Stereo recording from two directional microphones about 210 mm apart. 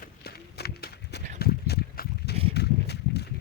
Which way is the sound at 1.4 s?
50° left (ahead or behind).